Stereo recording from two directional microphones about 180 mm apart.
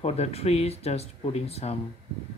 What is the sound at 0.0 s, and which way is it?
Speech, 35° left (ahead or behind).